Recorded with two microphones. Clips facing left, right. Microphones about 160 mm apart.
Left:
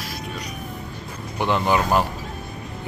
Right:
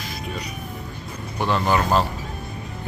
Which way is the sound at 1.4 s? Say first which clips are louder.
Left 1 dB; 15° left (ahead or behind).